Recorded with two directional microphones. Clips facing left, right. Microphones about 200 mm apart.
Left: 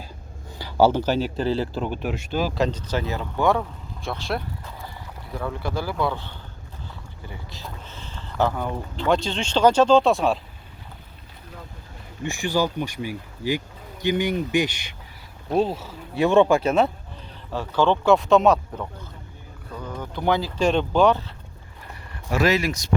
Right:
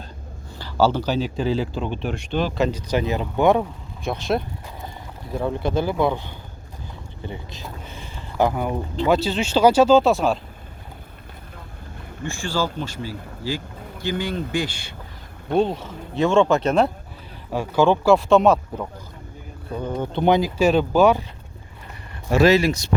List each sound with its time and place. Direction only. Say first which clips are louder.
0.6 s a sound: left 1 dB; 15° left (ahead or behind)
1.7 s speech: even; 5° left (ahead or behind)
2.6 s speech: right 4 dB; 10° right (ahead or behind)
12.2 s speech: left 2 dB; 15° left (ahead or behind)
15.4 s speech: right 2 dB; centre (ahead or behind)
17.5 s speech: right 3 dB; 10° right (ahead or behind)
19.7 s speech: right 7 dB; 30° right (ahead or behind)
20.6 s speech: even; 5° right (ahead or behind)
22.3 s speech: right 5 dB; 30° right (ahead or behind)